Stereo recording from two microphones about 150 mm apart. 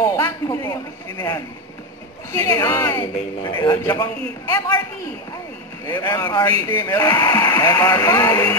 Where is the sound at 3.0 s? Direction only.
30° left (ahead or behind).